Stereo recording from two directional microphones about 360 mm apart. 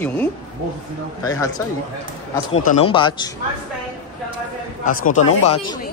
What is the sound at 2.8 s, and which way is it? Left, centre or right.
Speech, centre.